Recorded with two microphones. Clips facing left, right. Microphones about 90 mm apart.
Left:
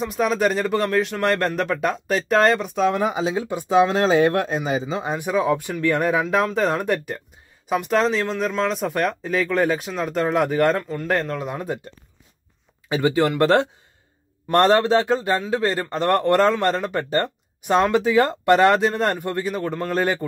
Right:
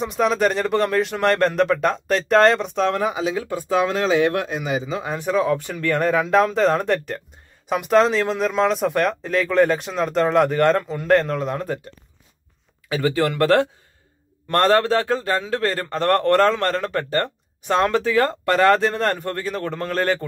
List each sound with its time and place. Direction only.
0.0 s speech: centre (ahead or behind)
3.0 s a man's voice: 25° left (ahead or behind); by 11.8 s 10° left (ahead or behind)
12.9 s a man's voice: 20° left (ahead or behind)